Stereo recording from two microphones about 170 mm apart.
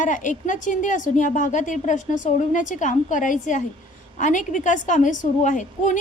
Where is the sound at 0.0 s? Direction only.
45° left (ahead or behind).